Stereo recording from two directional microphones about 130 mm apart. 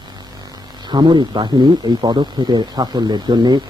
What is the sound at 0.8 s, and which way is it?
Speech, 35° right (ahead or behind).